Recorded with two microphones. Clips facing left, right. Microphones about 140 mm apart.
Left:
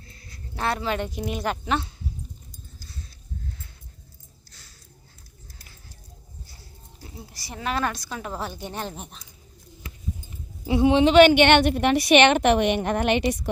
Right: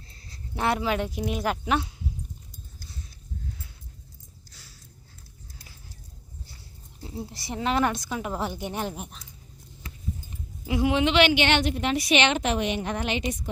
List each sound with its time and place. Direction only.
0.5 s speech: 15° right (ahead or behind)
7.0 s speech: 25° right (ahead or behind); by 9.2 s 5° right (ahead or behind)
10.7 s speech: 25° left (ahead or behind)
11.1 s a woman's voice: 50° left (ahead or behind); by 13.5 s 70° left (ahead or behind)